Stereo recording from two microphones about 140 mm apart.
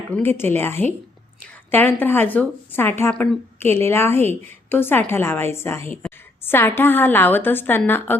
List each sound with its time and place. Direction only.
0.1 s a woman's voice: 15° left (ahead or behind)